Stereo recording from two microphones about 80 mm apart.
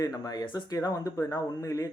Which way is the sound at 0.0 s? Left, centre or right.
Left.